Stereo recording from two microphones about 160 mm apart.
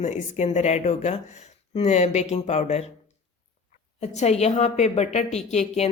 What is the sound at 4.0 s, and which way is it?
Speech, 45° left (ahead or behind).